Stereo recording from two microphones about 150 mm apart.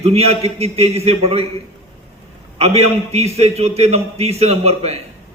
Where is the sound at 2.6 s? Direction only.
45° right (ahead or behind).